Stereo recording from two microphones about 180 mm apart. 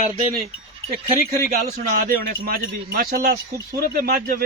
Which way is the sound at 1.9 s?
55° right (ahead or behind).